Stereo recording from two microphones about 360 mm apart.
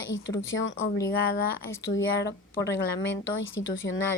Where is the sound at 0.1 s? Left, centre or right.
Left.